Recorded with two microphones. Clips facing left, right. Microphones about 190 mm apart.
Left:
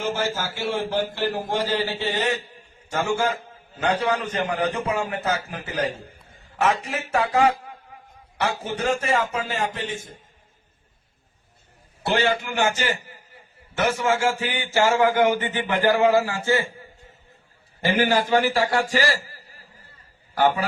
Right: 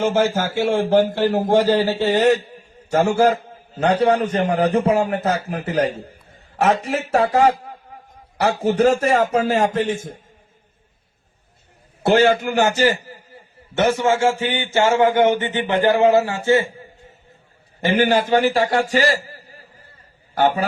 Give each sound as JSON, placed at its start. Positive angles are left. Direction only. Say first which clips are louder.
{"t": 0.0, "sound": "a man's voice", "louder": "right 8 dB", "side_deg": -50}
{"t": 6.6, "sound": "a man's voice", "louder": "right 5 dB", "side_deg": -35}
{"t": 12.0, "sound": "a man's voice", "louder": "right 8 dB", "side_deg": -45}
{"t": 17.8, "sound": "a man's voice", "louder": "right 4 dB", "side_deg": -20}